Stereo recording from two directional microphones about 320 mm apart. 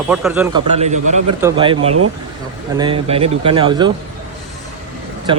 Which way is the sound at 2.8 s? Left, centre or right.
Centre.